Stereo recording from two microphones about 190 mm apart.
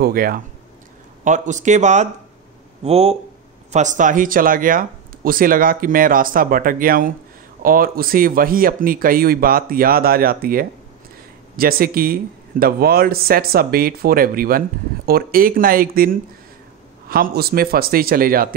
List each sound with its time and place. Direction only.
0.0 s speech: 50° right (ahead or behind)